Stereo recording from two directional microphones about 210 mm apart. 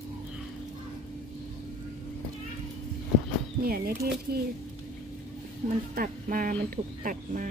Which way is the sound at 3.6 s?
45° right (ahead or behind).